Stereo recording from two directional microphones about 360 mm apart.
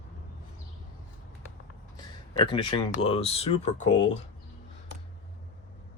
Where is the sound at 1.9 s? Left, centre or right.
Centre; by 4.1 s left.